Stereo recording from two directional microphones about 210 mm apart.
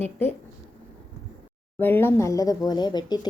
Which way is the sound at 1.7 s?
10° left (ahead or behind).